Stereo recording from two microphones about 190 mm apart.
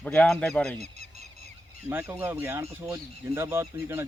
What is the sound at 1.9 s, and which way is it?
Speech, 10° right (ahead or behind).